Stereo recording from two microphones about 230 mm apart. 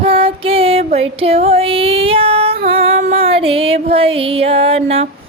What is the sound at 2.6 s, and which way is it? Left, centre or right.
Music, right.